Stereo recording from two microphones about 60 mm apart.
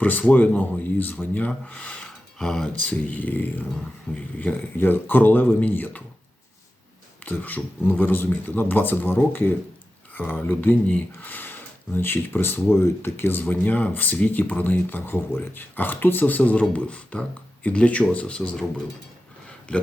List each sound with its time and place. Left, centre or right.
0.0 s speech: left
2.4 s speech: centre
2.7 s speech: left
4.1 s speech: centre
4.8 s speech: left
7.3 s speech: left
13.4 s speech: left